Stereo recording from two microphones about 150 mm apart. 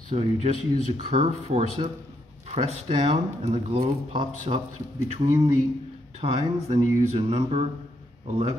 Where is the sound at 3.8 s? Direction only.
30° right (ahead or behind).